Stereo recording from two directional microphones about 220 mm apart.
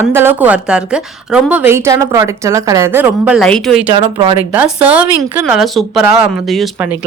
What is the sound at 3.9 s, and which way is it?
Speech, 20° right (ahead or behind).